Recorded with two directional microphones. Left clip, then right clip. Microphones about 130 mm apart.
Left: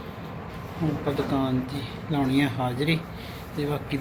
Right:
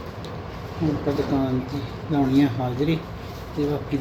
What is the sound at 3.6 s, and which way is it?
Speech, 5° right (ahead or behind).